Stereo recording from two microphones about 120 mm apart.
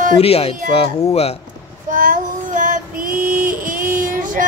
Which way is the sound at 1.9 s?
90° right.